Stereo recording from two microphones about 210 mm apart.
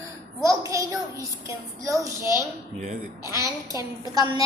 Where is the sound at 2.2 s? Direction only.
15° left (ahead or behind).